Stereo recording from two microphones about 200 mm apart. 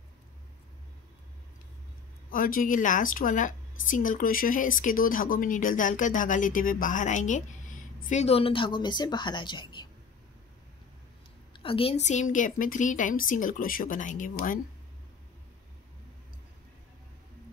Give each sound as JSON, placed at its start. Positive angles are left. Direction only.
{"t": 2.3, "sound": "a woman's voice", "side_deg": 45}
{"t": 11.5, "sound": "speech", "side_deg": 25}